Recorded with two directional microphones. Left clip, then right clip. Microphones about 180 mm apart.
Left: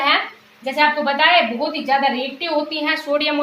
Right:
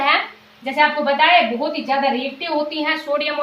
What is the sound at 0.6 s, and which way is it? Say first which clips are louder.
Speech: even; 20° left (ahead or behind).